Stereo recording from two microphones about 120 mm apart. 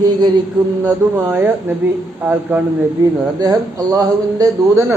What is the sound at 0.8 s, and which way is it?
A man's voice, 20° right (ahead or behind).